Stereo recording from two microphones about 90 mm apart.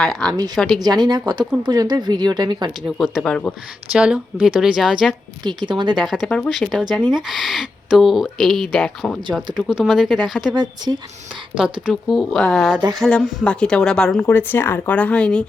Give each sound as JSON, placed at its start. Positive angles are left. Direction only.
{"t": 0.0, "sound": "speech", "side_deg": 5}
{"t": 0.8, "sound": "speech", "side_deg": -50}
{"t": 3.2, "sound": "speech", "side_deg": 10}
{"t": 3.9, "sound": "speech", "side_deg": -10}
{"t": 5.4, "sound": "speech", "side_deg": -55}
{"t": 6.0, "sound": "speech", "side_deg": 0}
{"t": 6.2, "sound": "speech", "side_deg": 10}
{"t": 6.5, "sound": "speech", "side_deg": 0}
{"t": 9.6, "sound": "speech", "side_deg": -5}
{"t": 10.5, "sound": "speech", "side_deg": -50}
{"t": 12.0, "sound": "speech", "side_deg": 0}
{"t": 14.2, "sound": "speech", "side_deg": 25}